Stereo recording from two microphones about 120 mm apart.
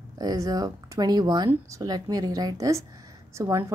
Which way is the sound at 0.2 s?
30° right (ahead or behind).